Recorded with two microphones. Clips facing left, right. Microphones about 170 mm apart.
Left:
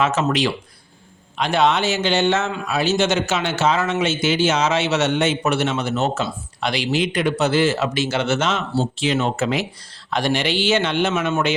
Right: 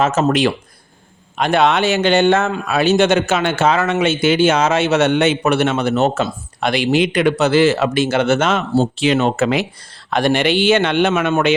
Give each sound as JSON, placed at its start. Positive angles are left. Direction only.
{"t": 0.0, "sound": "a man's voice", "side_deg": -45}